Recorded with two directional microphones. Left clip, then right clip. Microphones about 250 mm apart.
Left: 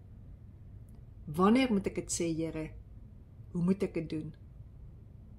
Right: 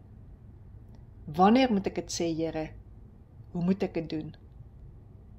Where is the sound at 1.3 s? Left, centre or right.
Left.